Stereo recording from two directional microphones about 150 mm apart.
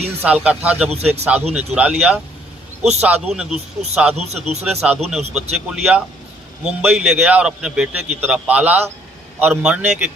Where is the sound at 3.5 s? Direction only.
45° right (ahead or behind).